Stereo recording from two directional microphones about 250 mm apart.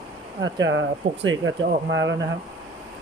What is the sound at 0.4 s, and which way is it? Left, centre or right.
Speech, right.